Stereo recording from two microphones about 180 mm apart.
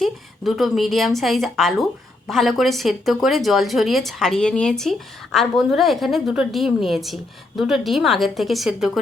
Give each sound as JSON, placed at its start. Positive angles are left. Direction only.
{"t": 0.0, "sound": "a woman's voice", "side_deg": 0}